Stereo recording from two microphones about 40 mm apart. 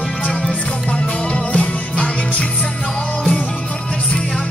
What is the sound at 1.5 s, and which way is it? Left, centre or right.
Music, left.